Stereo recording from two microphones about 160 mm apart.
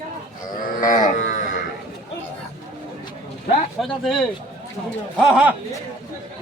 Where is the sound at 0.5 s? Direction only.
60° left (ahead or behind).